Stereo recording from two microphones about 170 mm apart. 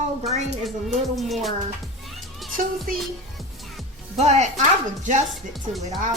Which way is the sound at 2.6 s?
50° right (ahead or behind).